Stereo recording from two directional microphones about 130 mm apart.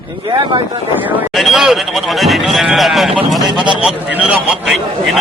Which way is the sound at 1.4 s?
Centre (ahead or behind).